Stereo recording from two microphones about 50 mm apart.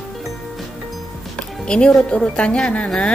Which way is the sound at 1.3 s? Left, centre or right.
Centre.